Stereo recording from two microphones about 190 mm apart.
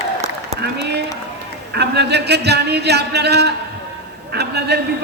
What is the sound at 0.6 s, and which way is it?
A man's voice, 60° right (ahead or behind).